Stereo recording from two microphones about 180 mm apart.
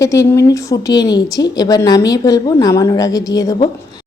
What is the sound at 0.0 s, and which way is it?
A woman's voice, 15° left (ahead or behind).